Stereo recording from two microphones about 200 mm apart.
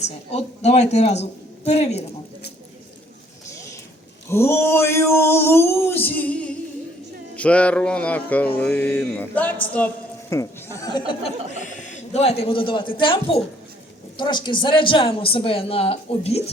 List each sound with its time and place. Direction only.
0.3 s a man's voice: 30° left (ahead or behind)
4.3 s a sound: 10° left (ahead or behind)
9.7 s a woman's voice: 10° left (ahead or behind)
12.1 s speech: 30° left (ahead or behind)